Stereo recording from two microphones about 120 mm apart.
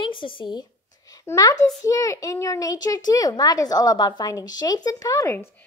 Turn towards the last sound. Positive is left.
turn(degrees=25)  # may be behind; listen again after turning